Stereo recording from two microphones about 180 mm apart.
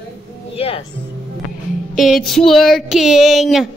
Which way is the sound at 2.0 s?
Centre (ahead or behind).